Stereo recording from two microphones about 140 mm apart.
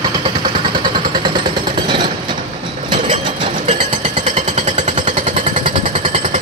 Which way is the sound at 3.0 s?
35° right (ahead or behind).